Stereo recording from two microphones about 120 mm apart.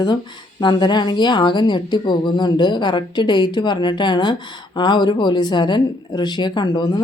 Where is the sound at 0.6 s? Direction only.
40° left (ahead or behind).